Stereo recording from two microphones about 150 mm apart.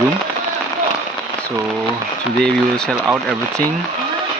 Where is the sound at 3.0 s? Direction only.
20° right (ahead or behind).